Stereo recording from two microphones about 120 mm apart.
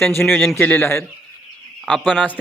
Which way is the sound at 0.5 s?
15° left (ahead or behind).